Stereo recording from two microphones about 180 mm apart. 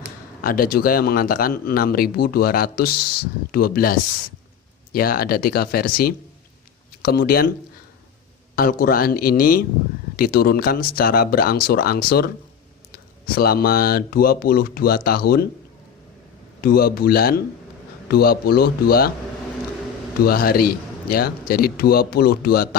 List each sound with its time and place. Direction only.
0.4 s speech: 55° left (ahead or behind)
8.5 s speech: 55° left (ahead or behind)
16.6 s speech: 55° left (ahead or behind)
20.2 s speech: 55° left (ahead or behind)